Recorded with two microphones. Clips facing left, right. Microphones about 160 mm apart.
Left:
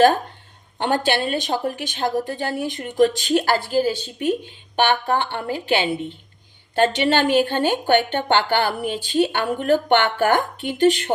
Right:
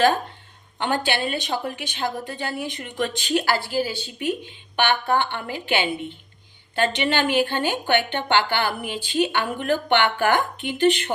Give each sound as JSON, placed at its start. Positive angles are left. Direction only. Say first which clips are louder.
{"t": 0.8, "sound": "a woman's voice", "louder": "left 3 dB", "side_deg": 40}